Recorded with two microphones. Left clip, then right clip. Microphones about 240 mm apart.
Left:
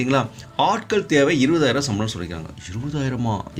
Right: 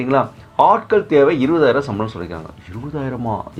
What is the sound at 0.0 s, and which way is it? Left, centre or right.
Speech, left.